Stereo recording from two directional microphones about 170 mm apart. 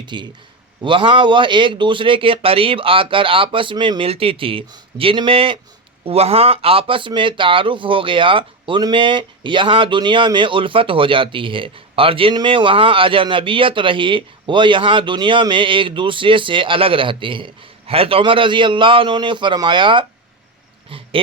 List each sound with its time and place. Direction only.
0.0 s a man's voice: 25° right (ahead or behind)